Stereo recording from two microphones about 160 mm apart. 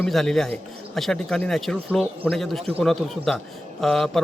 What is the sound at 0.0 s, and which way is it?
A man's voice, 5° left (ahead or behind).